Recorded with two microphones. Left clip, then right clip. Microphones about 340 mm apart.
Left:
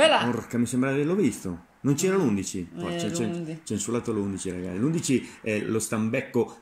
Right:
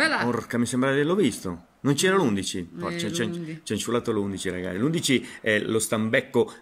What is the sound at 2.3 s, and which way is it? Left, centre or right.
Speech, right.